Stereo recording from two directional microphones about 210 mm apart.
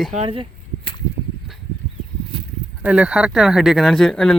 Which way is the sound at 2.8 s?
5° right (ahead or behind).